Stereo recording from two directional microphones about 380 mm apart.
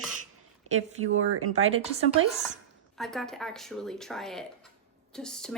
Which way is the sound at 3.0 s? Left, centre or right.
Centre.